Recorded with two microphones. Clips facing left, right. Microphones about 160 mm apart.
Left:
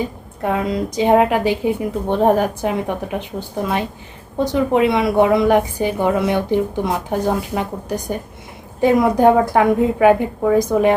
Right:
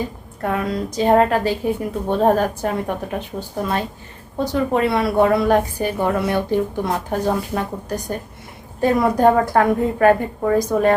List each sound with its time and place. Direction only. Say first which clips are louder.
0.0 s a woman's voice: left 2 dB; 15° left (ahead or behind)
4.4 s a woman's voice: left 3 dB; 15° left (ahead or behind)